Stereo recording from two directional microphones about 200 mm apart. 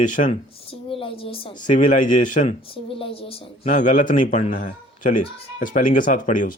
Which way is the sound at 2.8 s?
25° left (ahead or behind).